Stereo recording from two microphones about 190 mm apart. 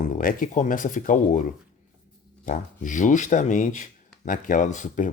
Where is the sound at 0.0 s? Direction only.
45° left (ahead or behind).